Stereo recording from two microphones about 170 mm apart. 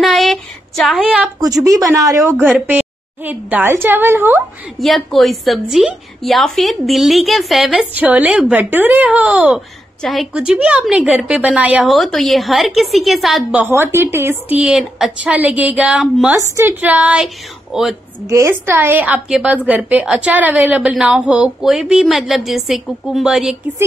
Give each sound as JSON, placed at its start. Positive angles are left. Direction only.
{"t": 0.0, "sound": "a sound", "side_deg": 0}
{"t": 1.4, "sound": "a woman's voice", "side_deg": -20}
{"t": 4.7, "sound": "a woman's voice", "side_deg": 0}